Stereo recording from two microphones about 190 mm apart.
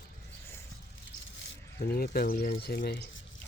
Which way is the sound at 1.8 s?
55° left (ahead or behind).